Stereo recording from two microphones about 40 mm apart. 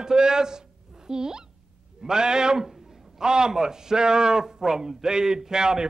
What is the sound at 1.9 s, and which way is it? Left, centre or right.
Speech, centre.